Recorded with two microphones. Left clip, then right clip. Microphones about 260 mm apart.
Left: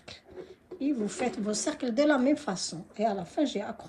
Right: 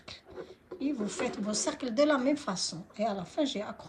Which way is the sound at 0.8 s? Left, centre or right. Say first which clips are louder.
Left 3 dB; centre.